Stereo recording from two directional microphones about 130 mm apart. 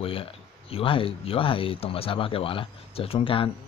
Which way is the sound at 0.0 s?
45° left (ahead or behind).